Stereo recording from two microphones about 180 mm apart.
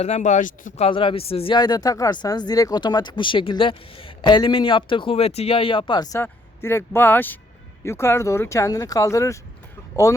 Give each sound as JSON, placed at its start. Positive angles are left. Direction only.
{"t": 0.0, "sound": "speech", "side_deg": 40}
{"t": 0.9, "sound": "speech", "side_deg": 30}